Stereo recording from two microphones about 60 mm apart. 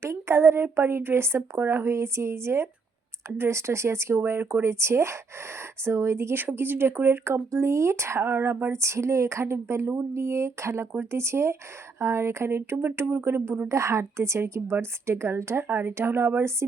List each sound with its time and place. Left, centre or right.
0.0 s a woman's voice: right
6.4 s speech: right
8.7 s a woman's voice: right
13.7 s a woman's voice: right